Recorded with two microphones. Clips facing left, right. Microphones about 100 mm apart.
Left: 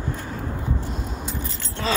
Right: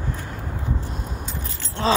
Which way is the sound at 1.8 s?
30° right (ahead or behind).